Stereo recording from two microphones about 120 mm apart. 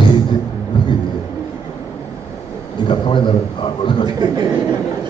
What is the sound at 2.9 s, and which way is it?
A man's voice, 45° left (ahead or behind).